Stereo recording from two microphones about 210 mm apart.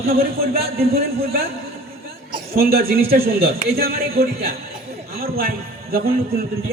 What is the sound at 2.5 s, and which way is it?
A man's voice, 45° right (ahead or behind).